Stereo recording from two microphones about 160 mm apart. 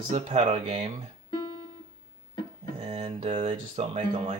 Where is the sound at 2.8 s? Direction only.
40° right (ahead or behind).